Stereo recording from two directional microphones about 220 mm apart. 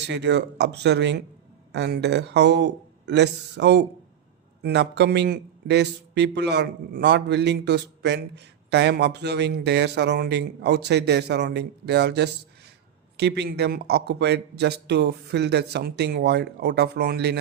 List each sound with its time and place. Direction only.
0.0 s a man's voice: 50° right (ahead or behind)